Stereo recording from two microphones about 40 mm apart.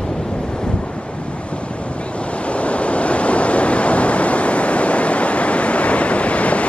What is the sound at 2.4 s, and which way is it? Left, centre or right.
Waves, left.